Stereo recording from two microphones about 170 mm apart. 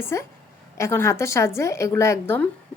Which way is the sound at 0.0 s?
15° left (ahead or behind).